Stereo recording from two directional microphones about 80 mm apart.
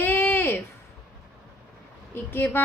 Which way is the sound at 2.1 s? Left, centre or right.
Left.